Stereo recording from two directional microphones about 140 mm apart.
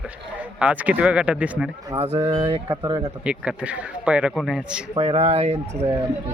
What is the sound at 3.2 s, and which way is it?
Speech, 10° right (ahead or behind).